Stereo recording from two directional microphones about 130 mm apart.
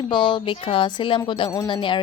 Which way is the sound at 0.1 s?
40° left (ahead or behind).